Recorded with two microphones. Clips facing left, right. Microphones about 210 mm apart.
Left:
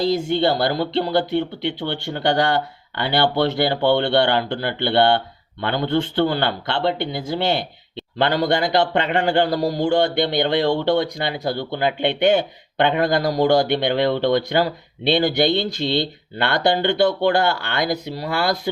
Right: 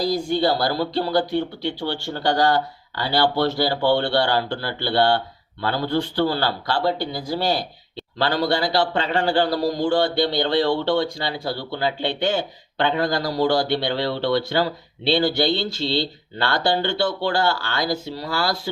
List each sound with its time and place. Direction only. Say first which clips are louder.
0.0 s speech: left 2 dB; 25° left (ahead or behind)
9.0 s speech: left 2 dB; 60° left (ahead or behind)
9.7 s speech: left 3 dB; 20° left (ahead or behind)
12.8 s speech: left 3 dB; 60° left (ahead or behind)
13.3 s speech: left 2 dB; 15° left (ahead or behind)
16.8 s speech: left 5 dB; 55° left (ahead or behind)
17.4 s speech: left 2 dB; 20° left (ahead or behind)